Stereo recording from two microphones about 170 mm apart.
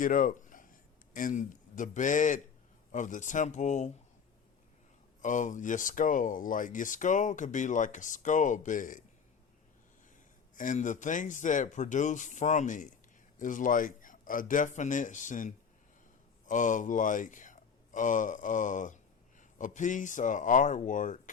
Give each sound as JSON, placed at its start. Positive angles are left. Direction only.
{"t": 0.0, "sound": "speech", "side_deg": 50}
{"t": 5.2, "sound": "speech", "side_deg": 50}
{"t": 10.5, "sound": "speech", "side_deg": 50}